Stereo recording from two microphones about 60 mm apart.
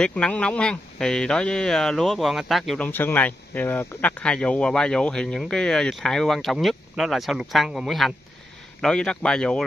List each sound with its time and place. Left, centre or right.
0.0 s speech: centre
2.8 s speech: left
4.2 s speech: centre
8.8 s speech: centre